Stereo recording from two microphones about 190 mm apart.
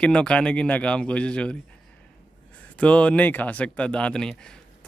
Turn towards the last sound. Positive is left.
turn(degrees=5)  # may be behind; listen again after turning